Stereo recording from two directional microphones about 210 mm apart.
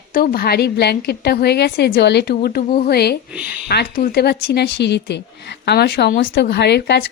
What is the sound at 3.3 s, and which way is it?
Speech, 5° right (ahead or behind).